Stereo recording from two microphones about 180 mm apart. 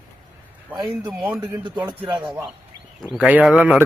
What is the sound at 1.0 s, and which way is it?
Speech, 10° right (ahead or behind).